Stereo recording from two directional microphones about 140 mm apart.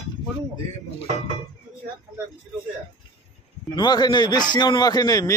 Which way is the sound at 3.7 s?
30° left (ahead or behind).